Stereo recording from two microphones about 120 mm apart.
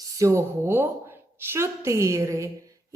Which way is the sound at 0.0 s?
25° right (ahead or behind).